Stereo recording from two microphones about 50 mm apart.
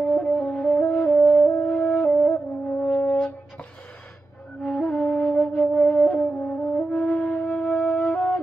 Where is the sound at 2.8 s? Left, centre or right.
Centre.